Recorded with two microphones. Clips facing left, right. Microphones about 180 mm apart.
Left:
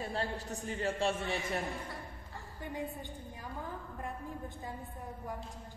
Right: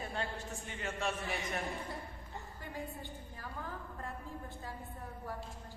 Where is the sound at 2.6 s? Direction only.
20° left (ahead or behind).